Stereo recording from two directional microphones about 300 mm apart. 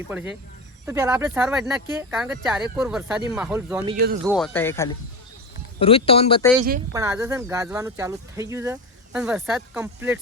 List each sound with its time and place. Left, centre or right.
0.1 s speech: centre
6.9 s speech: centre